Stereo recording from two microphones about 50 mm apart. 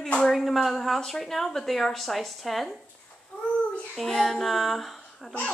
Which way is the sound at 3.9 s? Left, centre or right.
Centre.